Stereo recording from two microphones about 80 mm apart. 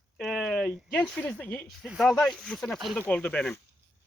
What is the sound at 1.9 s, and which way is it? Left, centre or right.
Speech, centre.